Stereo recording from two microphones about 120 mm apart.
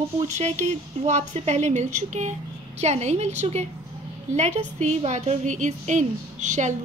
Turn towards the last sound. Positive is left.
turn(degrees=-85)